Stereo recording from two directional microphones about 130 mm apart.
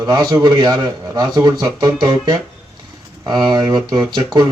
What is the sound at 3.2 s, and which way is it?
Speech, 35° right (ahead or behind).